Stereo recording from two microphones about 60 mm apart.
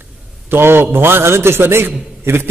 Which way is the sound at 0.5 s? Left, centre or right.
Right.